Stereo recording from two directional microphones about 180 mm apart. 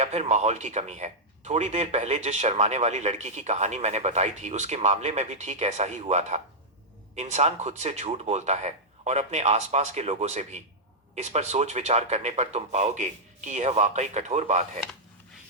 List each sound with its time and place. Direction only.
0.0 s speech: 40° right (ahead or behind)